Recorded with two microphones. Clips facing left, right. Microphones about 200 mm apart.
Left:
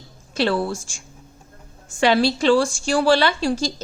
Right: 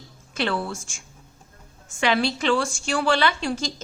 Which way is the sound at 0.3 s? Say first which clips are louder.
Left 5 dB; 35° left (ahead or behind).